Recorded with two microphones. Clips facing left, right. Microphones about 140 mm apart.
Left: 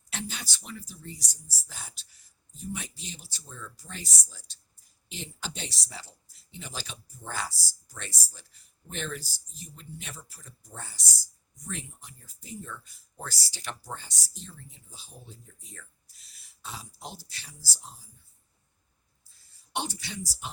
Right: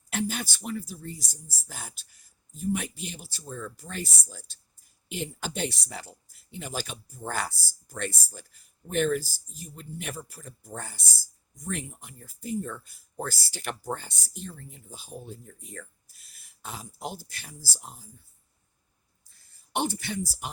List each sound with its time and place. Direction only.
0.1 s speech: 50° right (ahead or behind)
19.3 s speech: 55° right (ahead or behind)